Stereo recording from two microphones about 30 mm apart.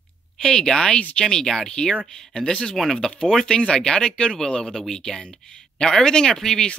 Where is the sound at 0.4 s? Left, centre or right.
Left.